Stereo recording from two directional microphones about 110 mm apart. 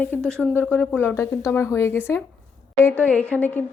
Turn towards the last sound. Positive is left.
turn(degrees=15)  # may be behind; listen again after turning